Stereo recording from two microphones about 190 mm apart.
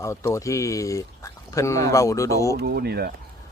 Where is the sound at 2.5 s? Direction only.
55° right (ahead or behind).